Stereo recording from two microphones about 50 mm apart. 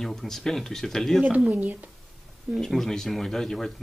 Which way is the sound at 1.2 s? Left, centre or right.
Right.